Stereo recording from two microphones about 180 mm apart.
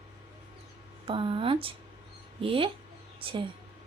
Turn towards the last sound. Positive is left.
turn(degrees=-30)  # may be behind; listen again after turning